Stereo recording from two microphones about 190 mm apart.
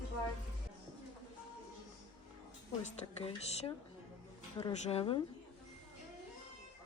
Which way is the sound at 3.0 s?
25° left (ahead or behind).